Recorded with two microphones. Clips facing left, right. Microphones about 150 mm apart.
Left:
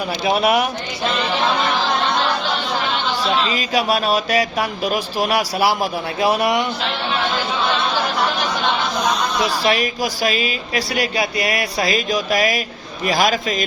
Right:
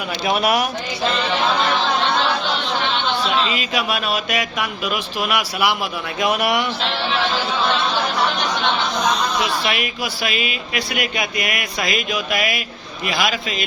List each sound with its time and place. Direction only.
0.3 s speech: 25° left (ahead or behind)
3.2 s speech: 35° left (ahead or behind)
8.2 s a sound: 5° left (ahead or behind)
9.6 s speech: 35° left (ahead or behind)